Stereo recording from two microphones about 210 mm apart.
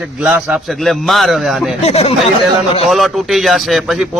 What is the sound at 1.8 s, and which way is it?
Speech, 30° left (ahead or behind).